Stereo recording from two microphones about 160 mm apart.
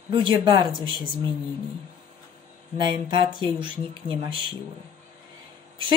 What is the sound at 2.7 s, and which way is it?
Speech, 30° right (ahead or behind).